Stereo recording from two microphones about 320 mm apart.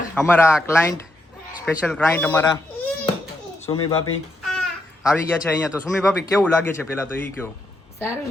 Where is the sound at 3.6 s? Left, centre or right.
Centre.